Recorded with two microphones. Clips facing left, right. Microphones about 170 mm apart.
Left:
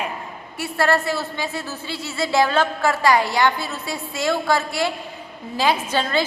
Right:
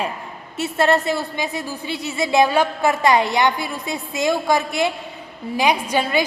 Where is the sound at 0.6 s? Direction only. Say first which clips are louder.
Right 2 dB; 20° right (ahead or behind).